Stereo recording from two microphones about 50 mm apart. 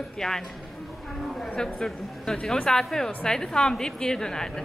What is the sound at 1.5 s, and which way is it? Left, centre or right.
A woman's voice, centre.